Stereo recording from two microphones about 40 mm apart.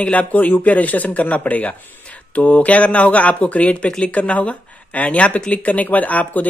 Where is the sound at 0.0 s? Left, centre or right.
Left.